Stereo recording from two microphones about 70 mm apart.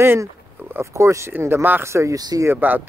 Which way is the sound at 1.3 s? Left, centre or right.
Right.